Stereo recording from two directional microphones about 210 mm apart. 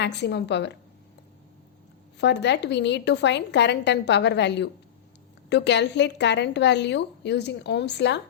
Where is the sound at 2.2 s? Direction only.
55° left (ahead or behind).